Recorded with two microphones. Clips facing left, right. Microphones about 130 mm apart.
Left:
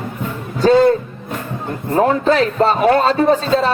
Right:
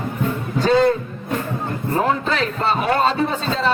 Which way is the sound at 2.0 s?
45° left (ahead or behind).